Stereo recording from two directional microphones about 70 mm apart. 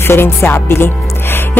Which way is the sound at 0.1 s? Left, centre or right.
Left.